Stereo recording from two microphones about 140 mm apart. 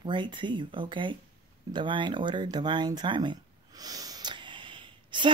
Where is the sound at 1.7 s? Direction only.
35° right (ahead or behind).